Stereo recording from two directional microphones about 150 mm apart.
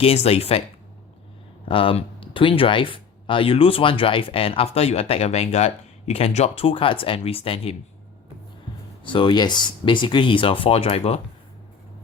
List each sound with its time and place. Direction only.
0.0 s speech: 40° left (ahead or behind)
1.6 s speech: 35° left (ahead or behind)
9.0 s speech: 30° left (ahead or behind)